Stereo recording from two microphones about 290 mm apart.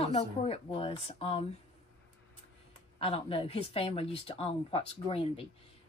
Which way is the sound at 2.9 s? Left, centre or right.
Centre.